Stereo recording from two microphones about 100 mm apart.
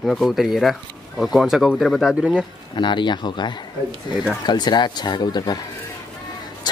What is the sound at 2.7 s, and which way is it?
Speech, 50° left (ahead or behind).